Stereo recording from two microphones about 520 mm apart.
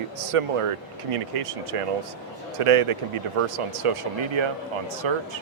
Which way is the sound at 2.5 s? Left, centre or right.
Right.